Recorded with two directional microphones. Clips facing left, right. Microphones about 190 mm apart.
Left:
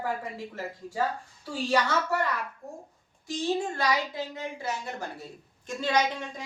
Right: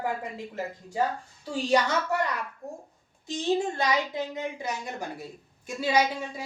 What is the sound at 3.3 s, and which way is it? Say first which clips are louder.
A woman's voice: right 2 dB; 20° right (ahead or behind).